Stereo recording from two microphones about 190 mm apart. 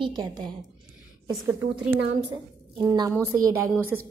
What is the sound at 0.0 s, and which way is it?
A woman's voice, 20° right (ahead or behind).